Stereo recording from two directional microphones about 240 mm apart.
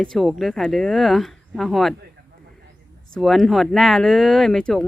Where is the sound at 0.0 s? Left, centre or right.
Centre.